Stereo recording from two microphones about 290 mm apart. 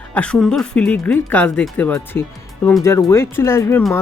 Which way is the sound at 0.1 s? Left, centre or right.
Centre.